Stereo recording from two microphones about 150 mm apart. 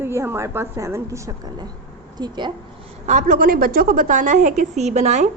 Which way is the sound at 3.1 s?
60° right (ahead or behind).